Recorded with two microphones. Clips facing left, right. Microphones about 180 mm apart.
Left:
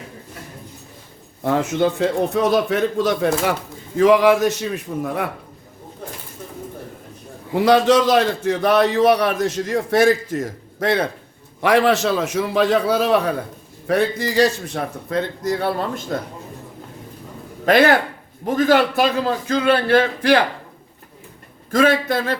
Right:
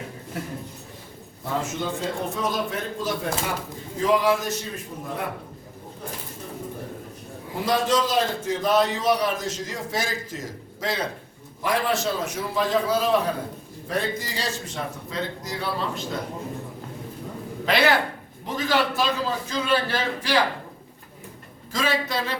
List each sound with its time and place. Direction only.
1.5 s a man's voice: 70° left (ahead or behind)
7.5 s a man's voice: 75° left (ahead or behind); by 11.1 s 60° left (ahead or behind)
11.6 s a man's voice: 75° left (ahead or behind); by 16.0 s 55° left (ahead or behind)
17.7 s a man's voice: 50° left (ahead or behind)
21.7 s speech: 55° left (ahead or behind)